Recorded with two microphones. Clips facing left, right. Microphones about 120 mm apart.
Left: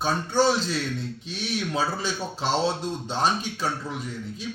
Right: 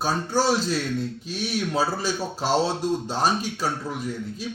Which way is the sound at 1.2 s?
45° right (ahead or behind).